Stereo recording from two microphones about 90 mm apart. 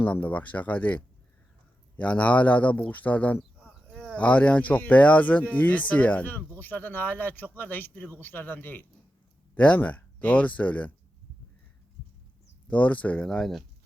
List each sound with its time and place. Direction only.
0.0 s speech: 15° left (ahead or behind)
12.6 s speech: 15° left (ahead or behind); by 13.7 s centre (ahead or behind)